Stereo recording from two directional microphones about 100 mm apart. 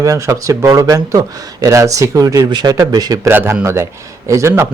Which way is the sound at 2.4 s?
45° right (ahead or behind).